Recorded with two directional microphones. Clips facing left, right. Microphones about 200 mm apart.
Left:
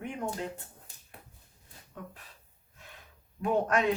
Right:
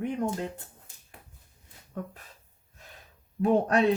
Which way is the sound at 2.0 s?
45° right (ahead or behind).